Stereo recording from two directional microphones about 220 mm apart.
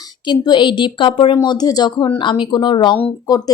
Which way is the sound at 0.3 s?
20° left (ahead or behind).